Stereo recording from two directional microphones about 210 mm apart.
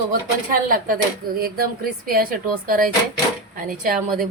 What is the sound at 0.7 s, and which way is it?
Speech, 45° right (ahead or behind).